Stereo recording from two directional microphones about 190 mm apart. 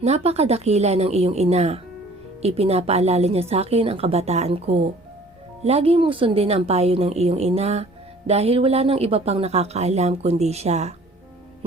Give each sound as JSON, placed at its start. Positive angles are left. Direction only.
{"t": 0.0, "sound": "speech", "side_deg": -35}